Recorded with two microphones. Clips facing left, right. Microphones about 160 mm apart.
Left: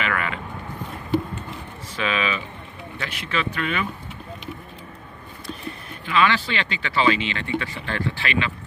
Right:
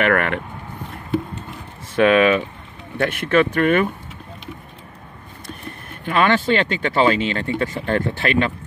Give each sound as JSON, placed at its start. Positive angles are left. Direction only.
{"t": 0.0, "sound": "speech", "side_deg": -60}
{"t": 2.0, "sound": "speech", "side_deg": -55}
{"t": 5.7, "sound": "speech", "side_deg": -50}